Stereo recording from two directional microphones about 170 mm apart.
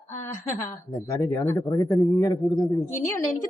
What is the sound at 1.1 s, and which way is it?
Speech, 20° left (ahead or behind).